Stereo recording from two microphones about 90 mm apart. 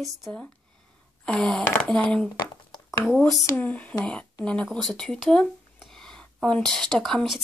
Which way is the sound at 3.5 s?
15° left (ahead or behind).